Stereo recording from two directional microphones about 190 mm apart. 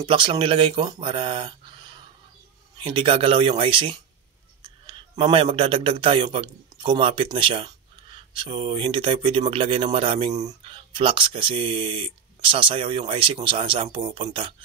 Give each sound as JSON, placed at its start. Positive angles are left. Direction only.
{"t": 0.0, "sound": "a man's voice", "side_deg": -25}